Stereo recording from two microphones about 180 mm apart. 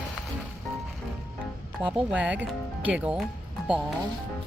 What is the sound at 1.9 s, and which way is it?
Speech, 5° right (ahead or behind).